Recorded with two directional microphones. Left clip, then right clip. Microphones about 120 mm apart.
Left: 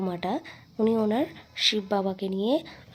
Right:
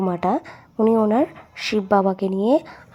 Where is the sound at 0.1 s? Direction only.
45° right (ahead or behind).